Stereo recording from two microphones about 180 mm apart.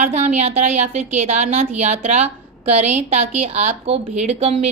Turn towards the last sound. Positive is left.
turn(degrees=-35)  # may be behind; listen again after turning